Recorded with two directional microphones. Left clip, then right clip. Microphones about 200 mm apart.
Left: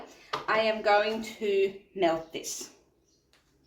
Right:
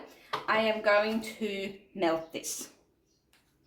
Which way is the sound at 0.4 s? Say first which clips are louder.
Left 1 dB; 40° right (ahead or behind).